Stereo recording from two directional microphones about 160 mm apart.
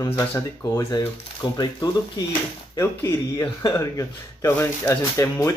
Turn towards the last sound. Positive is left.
turn(degrees=20)  # may be behind; listen again after turning